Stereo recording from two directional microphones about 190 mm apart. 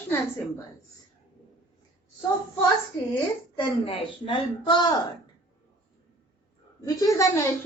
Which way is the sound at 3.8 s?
25° left (ahead or behind).